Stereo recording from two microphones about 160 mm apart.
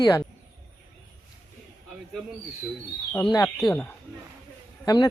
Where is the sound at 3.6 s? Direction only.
10° left (ahead or behind).